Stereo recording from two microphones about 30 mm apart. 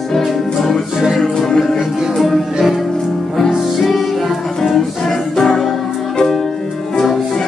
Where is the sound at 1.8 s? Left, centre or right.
Centre.